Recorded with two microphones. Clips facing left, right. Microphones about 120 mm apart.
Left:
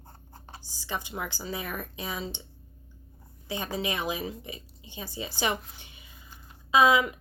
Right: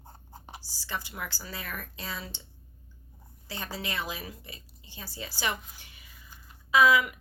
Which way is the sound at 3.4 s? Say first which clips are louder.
Left 6 dB; 20° left (ahead or behind).